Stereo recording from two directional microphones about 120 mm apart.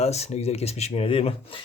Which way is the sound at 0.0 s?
60° left (ahead or behind).